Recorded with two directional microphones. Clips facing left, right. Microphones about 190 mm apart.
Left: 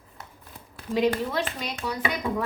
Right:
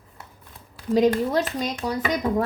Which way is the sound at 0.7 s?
40° right (ahead or behind).